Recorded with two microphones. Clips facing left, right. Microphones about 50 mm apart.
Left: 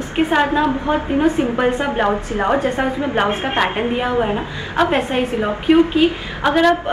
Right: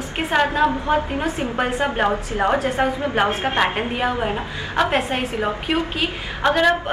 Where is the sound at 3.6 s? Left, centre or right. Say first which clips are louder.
Left 1 dB; centre.